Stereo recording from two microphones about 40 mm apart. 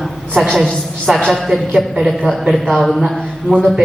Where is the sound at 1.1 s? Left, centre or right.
Right.